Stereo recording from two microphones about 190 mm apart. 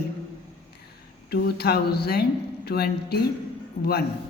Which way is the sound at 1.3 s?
55° left (ahead or behind).